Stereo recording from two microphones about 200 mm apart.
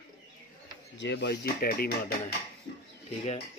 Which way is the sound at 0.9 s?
60° left (ahead or behind).